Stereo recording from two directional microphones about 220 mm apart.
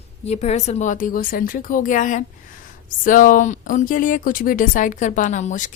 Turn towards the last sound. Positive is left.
turn(degrees=35)  # may be behind; listen again after turning